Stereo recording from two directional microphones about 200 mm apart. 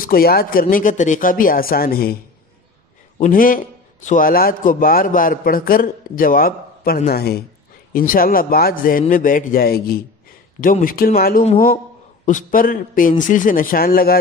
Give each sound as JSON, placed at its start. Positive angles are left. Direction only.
{"t": 0.0, "sound": "a man's voice", "side_deg": 50}
{"t": 3.2, "sound": "a man's voice", "side_deg": 45}